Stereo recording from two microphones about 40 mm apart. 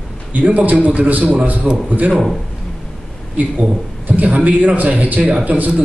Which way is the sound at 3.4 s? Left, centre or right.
Right.